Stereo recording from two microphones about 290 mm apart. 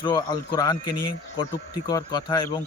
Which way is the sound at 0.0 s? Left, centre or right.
Centre.